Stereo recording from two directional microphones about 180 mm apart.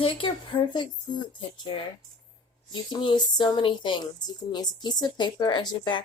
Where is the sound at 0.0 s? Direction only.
30° left (ahead or behind).